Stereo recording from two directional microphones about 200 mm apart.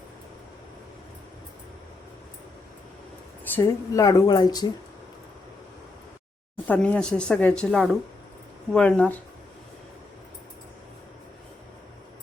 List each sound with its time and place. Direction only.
3.4 s speech: 10° left (ahead or behind)
6.7 s speech: 5° left (ahead or behind)